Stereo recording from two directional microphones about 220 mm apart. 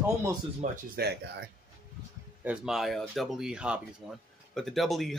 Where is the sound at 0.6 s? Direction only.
35° right (ahead or behind).